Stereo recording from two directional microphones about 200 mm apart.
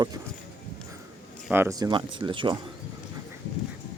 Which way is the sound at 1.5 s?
15° right (ahead or behind).